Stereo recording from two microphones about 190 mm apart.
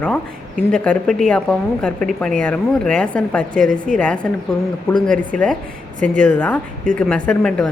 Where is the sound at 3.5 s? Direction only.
45° right (ahead or behind).